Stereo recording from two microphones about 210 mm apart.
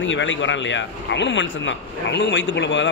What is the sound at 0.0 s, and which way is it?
Speech, 60° left (ahead or behind).